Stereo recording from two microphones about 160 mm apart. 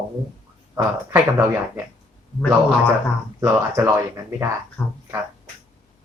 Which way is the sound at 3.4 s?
20° right (ahead or behind).